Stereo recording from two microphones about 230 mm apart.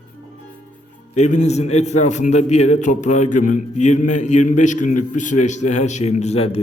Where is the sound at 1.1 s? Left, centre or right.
Left.